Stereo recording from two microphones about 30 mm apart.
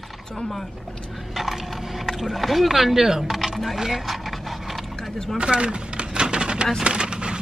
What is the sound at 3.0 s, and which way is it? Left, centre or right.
Speech, centre.